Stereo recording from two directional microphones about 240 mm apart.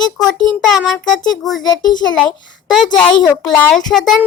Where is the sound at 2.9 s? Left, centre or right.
Centre.